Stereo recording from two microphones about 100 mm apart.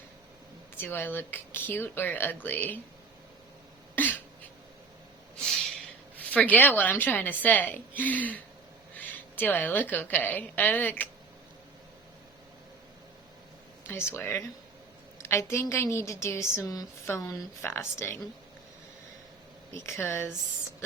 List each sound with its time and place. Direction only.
0.8 s speech: 20° left (ahead or behind)
3.9 s cough: 15° left (ahead or behind)
6.1 s a woman's voice: 15° left (ahead or behind)
13.8 s a woman's voice: 20° left (ahead or behind)
19.7 s speech: 25° left (ahead or behind)